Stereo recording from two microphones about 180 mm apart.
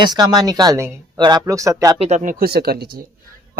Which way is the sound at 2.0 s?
40° right (ahead or behind).